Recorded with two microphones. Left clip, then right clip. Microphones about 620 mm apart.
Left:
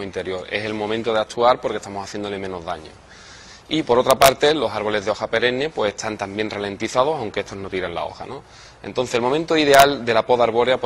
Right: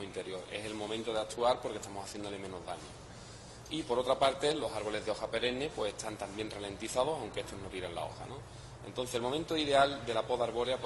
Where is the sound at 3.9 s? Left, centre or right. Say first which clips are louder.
Left 16 dB; left.